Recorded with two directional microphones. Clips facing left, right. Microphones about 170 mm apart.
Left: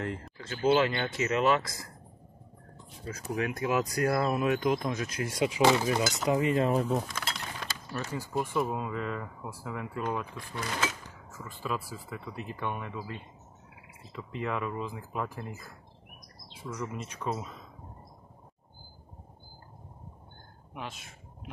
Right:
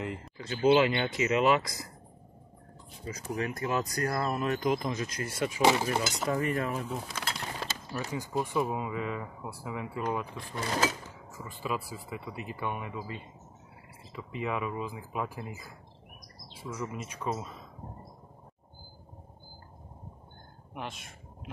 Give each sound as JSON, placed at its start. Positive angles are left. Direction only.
{"t": 0.0, "sound": "speech", "side_deg": 0}
{"t": 0.4, "sound": "speech", "side_deg": -15}
{"t": 3.1, "sound": "speech", "side_deg": -5}
{"t": 3.4, "sound": "speech", "side_deg": 10}
{"t": 5.6, "sound": "speech", "side_deg": -20}
{"t": 6.2, "sound": "cutlery", "side_deg": 20}
{"t": 6.7, "sound": "speech", "side_deg": 35}
{"t": 7.1, "sound": "a sound", "side_deg": -25}
{"t": 8.0, "sound": "speech", "side_deg": -15}
{"t": 8.4, "sound": "speech", "side_deg": -5}
{"t": 10.6, "sound": "a sound", "side_deg": -35}
{"t": 11.6, "sound": "speech", "side_deg": -10}
{"t": 14.1, "sound": "speech", "side_deg": -5}
{"t": 20.7, "sound": "speech", "side_deg": 0}